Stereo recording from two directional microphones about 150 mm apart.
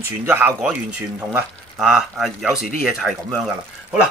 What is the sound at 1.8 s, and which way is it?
Speech, 5° right (ahead or behind).